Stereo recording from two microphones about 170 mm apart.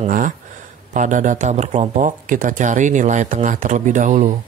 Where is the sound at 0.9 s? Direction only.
50° right (ahead or behind).